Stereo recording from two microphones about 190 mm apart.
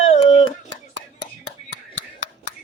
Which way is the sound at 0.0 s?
35° left (ahead or behind).